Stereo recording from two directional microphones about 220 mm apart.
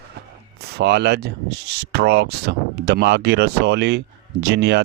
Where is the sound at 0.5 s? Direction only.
50° right (ahead or behind).